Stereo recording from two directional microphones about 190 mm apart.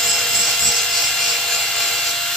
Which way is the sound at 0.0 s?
Centre (ahead or behind).